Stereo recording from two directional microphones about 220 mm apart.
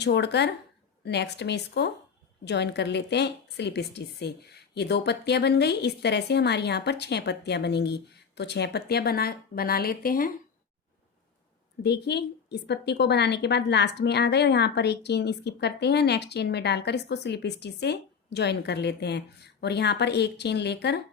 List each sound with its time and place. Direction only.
0.0 s speech: 50° left (ahead or behind)
11.8 s speech: 50° left (ahead or behind)